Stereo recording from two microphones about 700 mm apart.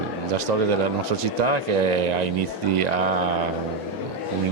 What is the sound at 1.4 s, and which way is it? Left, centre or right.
Speech, right.